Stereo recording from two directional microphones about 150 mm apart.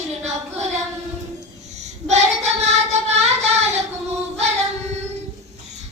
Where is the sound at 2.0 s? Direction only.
50° right (ahead or behind).